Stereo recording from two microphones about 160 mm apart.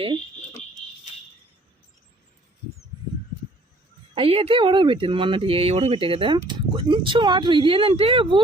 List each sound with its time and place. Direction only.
4.1 s speech: 35° right (ahead or behind)